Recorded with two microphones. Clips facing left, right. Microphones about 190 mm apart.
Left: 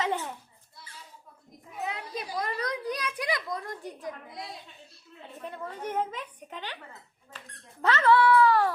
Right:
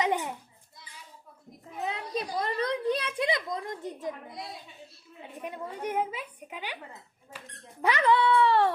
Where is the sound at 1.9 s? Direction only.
30° right (ahead or behind).